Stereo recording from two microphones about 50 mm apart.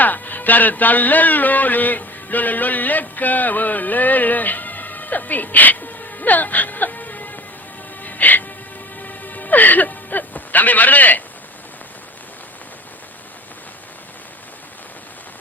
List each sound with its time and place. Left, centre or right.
0.0 s speech: left
8.0 s music: left
9.0 s whimper: left